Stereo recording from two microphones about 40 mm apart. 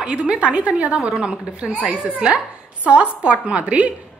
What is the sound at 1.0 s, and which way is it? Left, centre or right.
A woman's voice, right.